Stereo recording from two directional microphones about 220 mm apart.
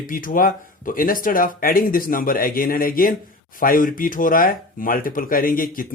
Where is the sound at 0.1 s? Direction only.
40° left (ahead or behind).